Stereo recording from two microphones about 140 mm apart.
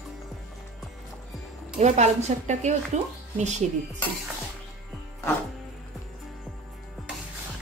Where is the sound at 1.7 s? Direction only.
55° right (ahead or behind).